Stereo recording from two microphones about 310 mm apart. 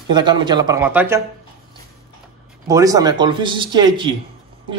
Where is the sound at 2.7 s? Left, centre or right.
Centre.